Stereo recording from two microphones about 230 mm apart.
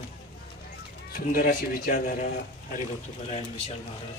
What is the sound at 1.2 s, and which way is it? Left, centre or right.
Speech, left.